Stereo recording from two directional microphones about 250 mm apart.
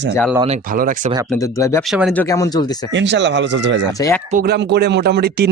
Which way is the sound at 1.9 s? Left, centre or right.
Centre.